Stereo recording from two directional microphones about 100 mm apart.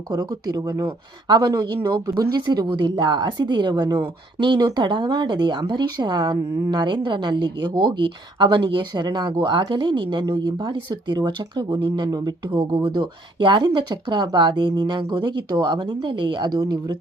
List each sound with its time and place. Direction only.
0.1 s a woman's voice: 40° right (ahead or behind)